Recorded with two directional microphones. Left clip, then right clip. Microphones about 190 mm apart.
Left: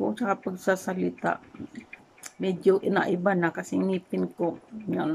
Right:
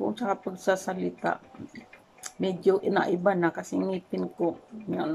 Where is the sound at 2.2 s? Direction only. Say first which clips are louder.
Even; 5° left (ahead or behind).